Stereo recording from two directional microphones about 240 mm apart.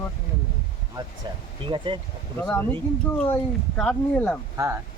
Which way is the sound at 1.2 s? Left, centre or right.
Centre.